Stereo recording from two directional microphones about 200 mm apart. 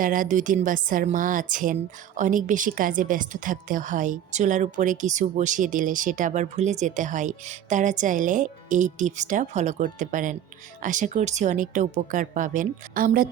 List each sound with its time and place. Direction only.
0.0 s a woman's voice: 45° right (ahead or behind)